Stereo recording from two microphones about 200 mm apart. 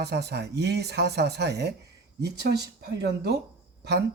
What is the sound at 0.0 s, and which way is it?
Speech, 55° right (ahead or behind).